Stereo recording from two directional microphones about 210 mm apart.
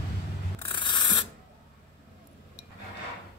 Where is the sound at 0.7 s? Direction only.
20° left (ahead or behind).